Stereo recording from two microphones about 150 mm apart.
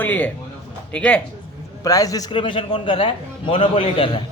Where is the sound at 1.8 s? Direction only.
25° left (ahead or behind).